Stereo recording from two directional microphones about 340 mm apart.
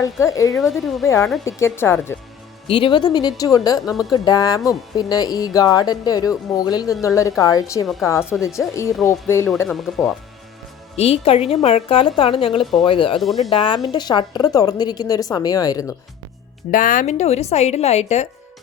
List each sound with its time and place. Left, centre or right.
0.0 s speech: centre
10.9 s speech: centre
13.2 s speech: centre
13.5 s speech: centre
16.7 s a woman's voice: left